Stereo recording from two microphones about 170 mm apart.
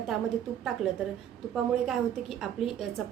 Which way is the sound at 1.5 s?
5° right (ahead or behind).